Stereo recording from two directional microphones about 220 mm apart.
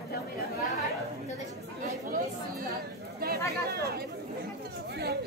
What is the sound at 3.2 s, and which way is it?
Chatter, 45° right (ahead or behind).